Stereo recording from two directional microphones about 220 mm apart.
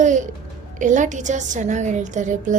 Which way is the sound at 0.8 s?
35° right (ahead or behind).